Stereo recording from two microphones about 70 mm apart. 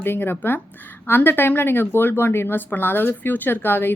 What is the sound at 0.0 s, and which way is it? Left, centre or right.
A woman's voice, left.